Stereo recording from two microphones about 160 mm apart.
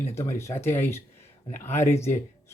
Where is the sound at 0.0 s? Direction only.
15° left (ahead or behind).